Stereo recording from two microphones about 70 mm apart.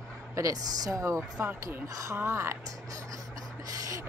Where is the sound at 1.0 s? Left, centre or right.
Right.